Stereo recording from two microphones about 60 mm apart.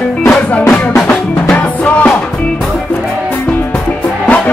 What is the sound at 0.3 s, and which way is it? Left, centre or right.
Music, centre.